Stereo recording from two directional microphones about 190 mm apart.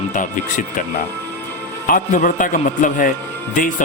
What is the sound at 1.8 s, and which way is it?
Speech, 45° left (ahead or behind).